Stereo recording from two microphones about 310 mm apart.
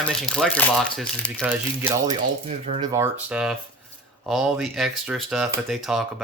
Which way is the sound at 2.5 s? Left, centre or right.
Centre.